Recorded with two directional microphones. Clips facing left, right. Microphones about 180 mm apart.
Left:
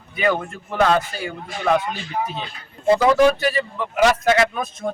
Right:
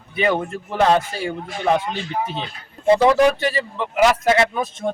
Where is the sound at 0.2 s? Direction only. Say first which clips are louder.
Right 1 dB; 30° right (ahead or behind).